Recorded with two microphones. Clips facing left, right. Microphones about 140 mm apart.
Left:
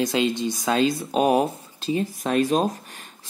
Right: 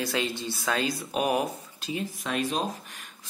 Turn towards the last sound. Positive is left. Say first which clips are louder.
# left 7 dB
turn(degrees=40)  # may be behind; listen again after turning